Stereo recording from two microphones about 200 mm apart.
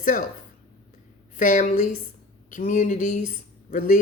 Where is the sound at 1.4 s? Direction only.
40° left (ahead or behind).